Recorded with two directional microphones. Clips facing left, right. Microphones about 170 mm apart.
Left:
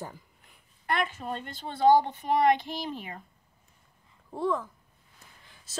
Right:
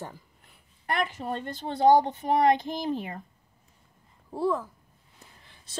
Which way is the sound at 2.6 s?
40° right (ahead or behind).